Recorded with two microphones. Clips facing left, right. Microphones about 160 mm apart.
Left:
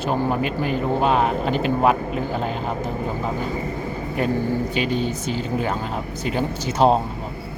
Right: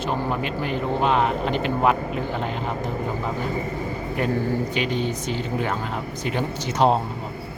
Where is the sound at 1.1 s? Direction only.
40° left (ahead or behind).